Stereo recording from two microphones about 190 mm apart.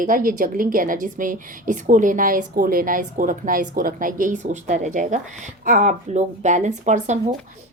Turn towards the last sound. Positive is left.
turn(degrees=-40)  # may be behind; listen again after turning